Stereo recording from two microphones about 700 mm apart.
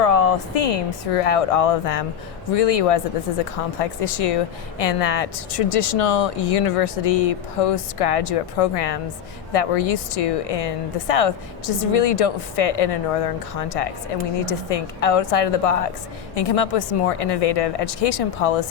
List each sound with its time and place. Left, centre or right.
0.0 s a woman's voice: left